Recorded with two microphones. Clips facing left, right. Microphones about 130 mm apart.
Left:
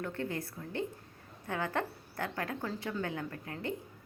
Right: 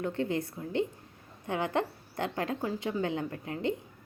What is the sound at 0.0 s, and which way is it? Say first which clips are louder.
A woman's voice: right 6 dB; 20° right (ahead or behind).